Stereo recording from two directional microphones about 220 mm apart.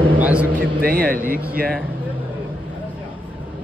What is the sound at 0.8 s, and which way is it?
Speech, 45° right (ahead or behind).